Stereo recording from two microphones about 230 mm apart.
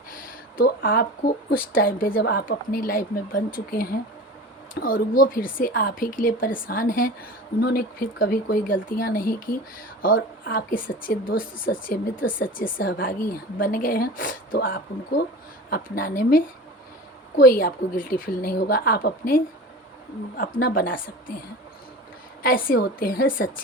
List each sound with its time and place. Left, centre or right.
0.1 s a sound: left
1.5 s a woman's voice: left
22.4 s a woman's voice: left